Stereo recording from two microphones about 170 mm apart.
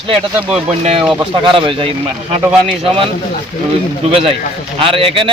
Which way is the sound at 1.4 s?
30° right (ahead or behind).